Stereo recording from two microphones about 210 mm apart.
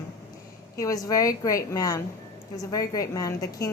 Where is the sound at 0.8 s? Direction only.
15° left (ahead or behind).